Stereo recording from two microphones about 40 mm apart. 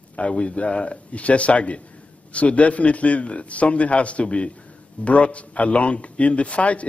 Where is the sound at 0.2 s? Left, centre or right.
Left.